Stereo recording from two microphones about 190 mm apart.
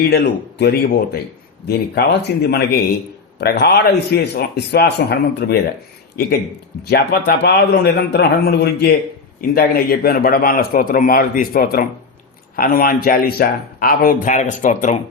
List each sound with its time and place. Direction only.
0.0 s a man's voice: 60° left (ahead or behind)
6.9 s a man's voice: 55° left (ahead or behind); by 14.9 s 40° left (ahead or behind)